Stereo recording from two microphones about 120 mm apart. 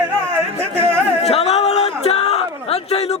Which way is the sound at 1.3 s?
55° left (ahead or behind).